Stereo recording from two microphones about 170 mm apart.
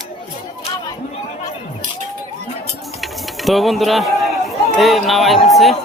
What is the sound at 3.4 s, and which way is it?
Speech, centre (ahead or behind).